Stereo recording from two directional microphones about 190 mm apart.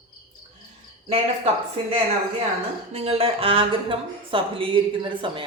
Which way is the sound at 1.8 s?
25° right (ahead or behind).